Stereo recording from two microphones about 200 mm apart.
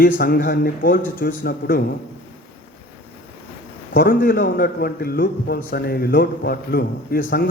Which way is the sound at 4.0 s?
45° left (ahead or behind).